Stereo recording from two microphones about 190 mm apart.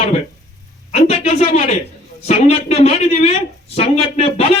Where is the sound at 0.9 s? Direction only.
35° left (ahead or behind).